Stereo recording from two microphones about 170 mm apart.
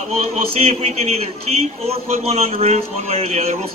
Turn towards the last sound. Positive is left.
turn(degrees=-40)  # may be behind; listen again after turning